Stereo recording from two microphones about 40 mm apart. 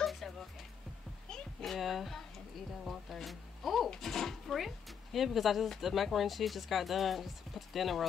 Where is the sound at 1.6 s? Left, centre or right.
Centre.